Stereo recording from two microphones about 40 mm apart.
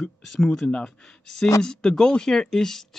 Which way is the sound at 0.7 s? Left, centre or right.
Left.